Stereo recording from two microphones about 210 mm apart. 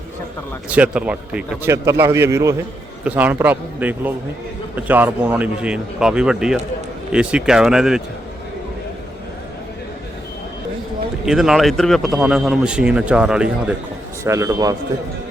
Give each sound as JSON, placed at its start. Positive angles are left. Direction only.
{"t": 0.7, "sound": "a man's voice", "side_deg": -5}
{"t": 11.3, "sound": "a man's voice", "side_deg": 0}
{"t": 14.3, "sound": "a man's voice", "side_deg": -15}